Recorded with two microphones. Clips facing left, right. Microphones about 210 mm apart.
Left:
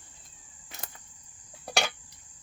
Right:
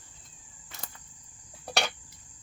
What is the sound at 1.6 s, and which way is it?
Cricket, centre (ahead or behind).